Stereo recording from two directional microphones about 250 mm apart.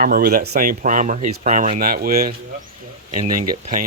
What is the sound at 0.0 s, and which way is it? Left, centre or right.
Speech, right.